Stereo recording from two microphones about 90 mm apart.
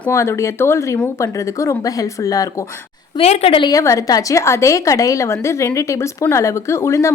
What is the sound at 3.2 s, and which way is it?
Speech, 90° left.